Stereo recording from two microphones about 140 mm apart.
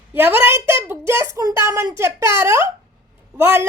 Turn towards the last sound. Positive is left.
turn(degrees=-20)  # may be behind; listen again after turning